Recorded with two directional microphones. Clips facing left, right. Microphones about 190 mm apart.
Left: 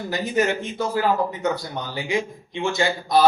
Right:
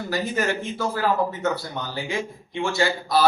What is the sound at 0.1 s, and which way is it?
Speech, 20° left (ahead or behind).